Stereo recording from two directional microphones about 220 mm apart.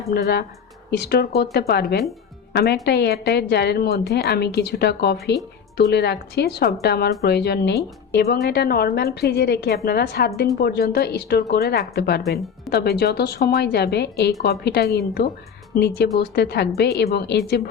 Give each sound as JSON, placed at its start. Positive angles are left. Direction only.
{"t": 0.1, "sound": "speech", "side_deg": 45}
{"t": 12.2, "sound": "speech", "side_deg": 0}
{"t": 12.7, "sound": "speech", "side_deg": 45}